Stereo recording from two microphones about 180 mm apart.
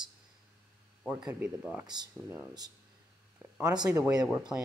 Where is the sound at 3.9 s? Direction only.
10° right (ahead or behind).